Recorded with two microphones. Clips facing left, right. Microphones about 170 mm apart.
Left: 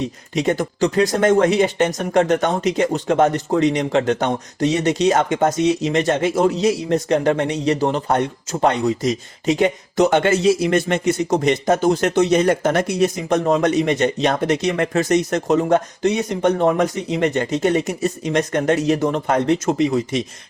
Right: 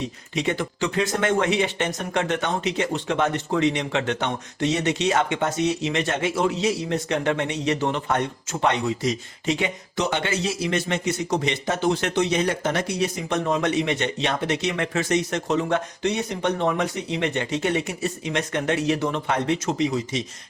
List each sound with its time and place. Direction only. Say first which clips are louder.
0.3 s speech: left 6 dB; 40° left (ahead or behind); by 20.2 s 55° left (ahead or behind)